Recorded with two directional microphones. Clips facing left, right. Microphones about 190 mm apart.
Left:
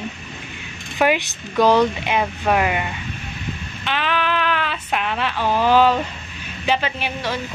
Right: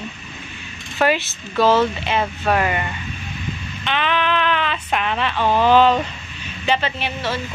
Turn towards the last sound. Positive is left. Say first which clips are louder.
# even
turn(degrees=10)  # may be behind; listen again after turning